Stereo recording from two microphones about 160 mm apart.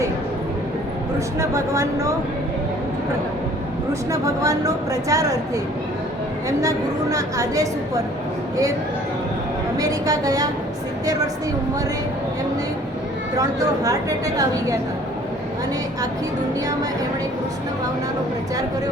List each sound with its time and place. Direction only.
1.4 s a woman's voice: 20° right (ahead or behind)
4.1 s a woman's voice: 20° right (ahead or behind)
6.6 s a woman's voice: 20° right (ahead or behind)
9.7 s a woman's voice: 20° right (ahead or behind)
13.3 s a woman's voice: 20° right (ahead or behind)